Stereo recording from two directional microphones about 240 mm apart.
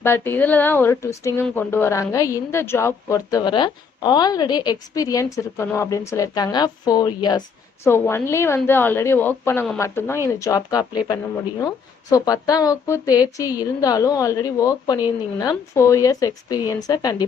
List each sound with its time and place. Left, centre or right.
0.0 s speech: centre